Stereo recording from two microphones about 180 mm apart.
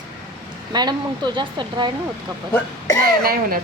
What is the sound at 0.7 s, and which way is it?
Speech, 25° right (ahead or behind).